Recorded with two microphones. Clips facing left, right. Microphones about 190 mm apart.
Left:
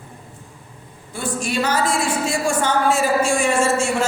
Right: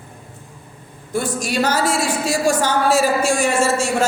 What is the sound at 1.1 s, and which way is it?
Speech, 40° right (ahead or behind).